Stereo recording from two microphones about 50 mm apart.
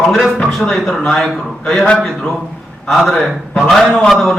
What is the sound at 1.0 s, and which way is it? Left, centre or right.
Speech, centre.